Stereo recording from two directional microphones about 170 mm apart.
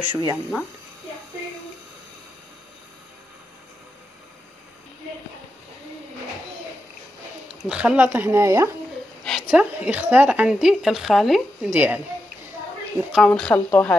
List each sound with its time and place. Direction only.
0.0 s speech: 20° right (ahead or behind)
7.6 s speech: 5° right (ahead or behind)
9.2 s a sound: centre (ahead or behind)
9.6 s speech: 10° right (ahead or behind)
13.3 s speech: 5° left (ahead or behind)